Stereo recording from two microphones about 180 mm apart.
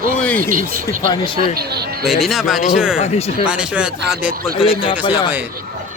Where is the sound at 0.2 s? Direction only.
10° left (ahead or behind).